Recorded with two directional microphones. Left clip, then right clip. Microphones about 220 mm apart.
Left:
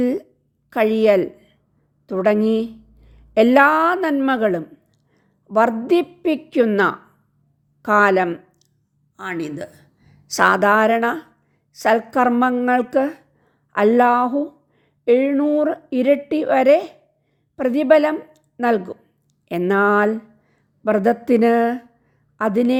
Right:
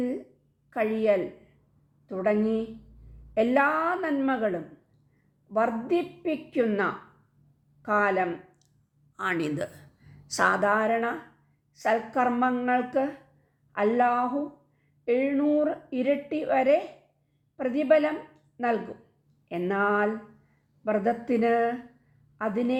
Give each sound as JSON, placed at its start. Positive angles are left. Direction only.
{"t": 0.7, "sound": "a woman's voice", "side_deg": 45}
{"t": 9.1, "sound": "a sound", "side_deg": 15}
{"t": 10.2, "sound": "a woman's voice", "side_deg": 30}